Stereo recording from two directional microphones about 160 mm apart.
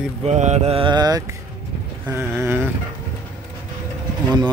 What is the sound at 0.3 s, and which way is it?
Mantra, 45° right (ahead or behind).